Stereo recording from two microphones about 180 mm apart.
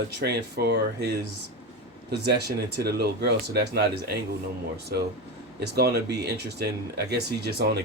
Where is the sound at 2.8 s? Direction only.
65° right (ahead or behind).